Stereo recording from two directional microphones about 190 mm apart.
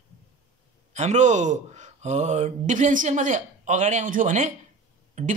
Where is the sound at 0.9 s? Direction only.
40° right (ahead or behind).